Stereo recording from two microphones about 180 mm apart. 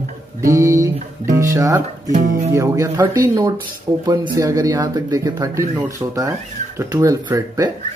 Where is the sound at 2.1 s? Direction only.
45° right (ahead or behind).